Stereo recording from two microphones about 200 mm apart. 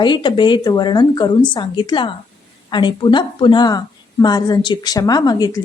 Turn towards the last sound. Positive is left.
turn(degrees=20)  # may be behind; listen again after turning